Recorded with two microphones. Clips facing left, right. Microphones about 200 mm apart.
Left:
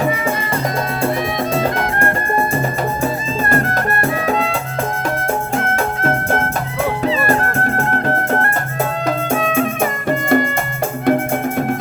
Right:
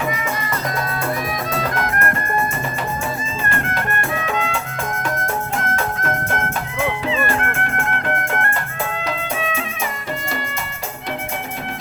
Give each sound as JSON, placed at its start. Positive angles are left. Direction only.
{"t": 1.5, "sound": "music", "side_deg": 25}
{"t": 3.5, "sound": "music", "side_deg": 40}
{"t": 9.0, "sound": "music", "side_deg": 45}